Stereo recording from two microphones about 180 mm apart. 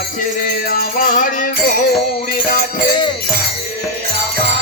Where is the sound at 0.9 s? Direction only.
50° left (ahead or behind).